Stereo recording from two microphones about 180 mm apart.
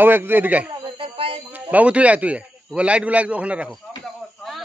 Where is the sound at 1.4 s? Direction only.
10° right (ahead or behind).